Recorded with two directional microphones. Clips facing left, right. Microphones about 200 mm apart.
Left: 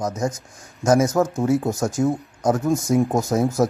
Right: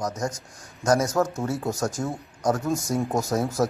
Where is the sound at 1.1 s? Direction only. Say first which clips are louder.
Left 6 dB; 20° left (ahead or behind).